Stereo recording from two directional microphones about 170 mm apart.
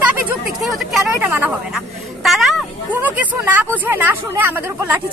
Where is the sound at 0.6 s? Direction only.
Centre (ahead or behind).